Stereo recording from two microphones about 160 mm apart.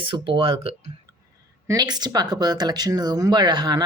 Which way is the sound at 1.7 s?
25° right (ahead or behind).